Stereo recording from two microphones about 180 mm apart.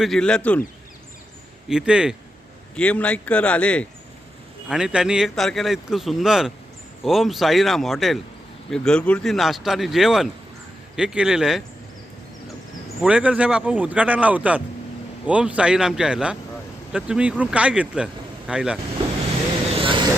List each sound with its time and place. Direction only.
0.0 s speech: 5° left (ahead or behind)
1.7 s speech: 5° right (ahead or behind)
2.7 s a man's voice: 5° left (ahead or behind)
4.7 s speech: 5° right (ahead or behind)
13.0 s speech: 5° right (ahead or behind)
19.8 s vehicle: 25° right (ahead or behind)